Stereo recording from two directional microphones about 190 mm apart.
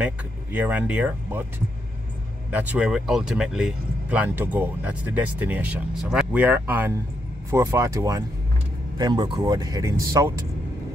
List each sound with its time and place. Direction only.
0.0 s speech: 10° right (ahead or behind)
2.5 s speech: 10° right (ahead or behind)